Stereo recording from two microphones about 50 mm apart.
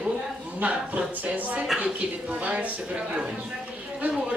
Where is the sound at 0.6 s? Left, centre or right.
Right.